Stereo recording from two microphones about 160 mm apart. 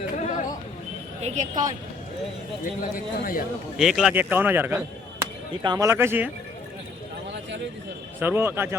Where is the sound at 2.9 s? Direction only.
60° left (ahead or behind).